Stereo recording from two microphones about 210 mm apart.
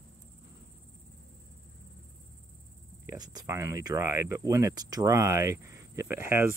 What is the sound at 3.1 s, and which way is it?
Speech, 20° right (ahead or behind).